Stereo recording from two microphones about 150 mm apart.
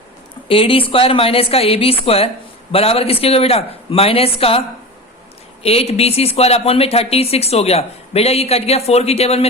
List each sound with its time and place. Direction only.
0.4 s speech: 35° left (ahead or behind)
5.6 s speech: 45° left (ahead or behind)